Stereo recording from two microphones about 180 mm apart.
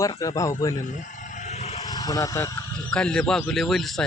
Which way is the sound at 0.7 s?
45° left (ahead or behind).